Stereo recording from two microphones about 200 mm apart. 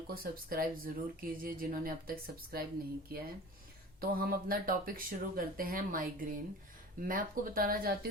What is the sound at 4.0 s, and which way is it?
A woman's voice, 45° right (ahead or behind).